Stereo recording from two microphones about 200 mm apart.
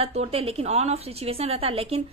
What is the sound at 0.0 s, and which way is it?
A woman's voice, 30° right (ahead or behind).